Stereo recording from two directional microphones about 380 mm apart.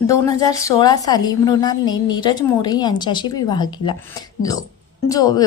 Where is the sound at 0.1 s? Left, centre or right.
Centre.